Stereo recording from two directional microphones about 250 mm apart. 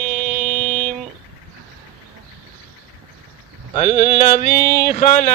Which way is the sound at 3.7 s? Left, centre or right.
Left.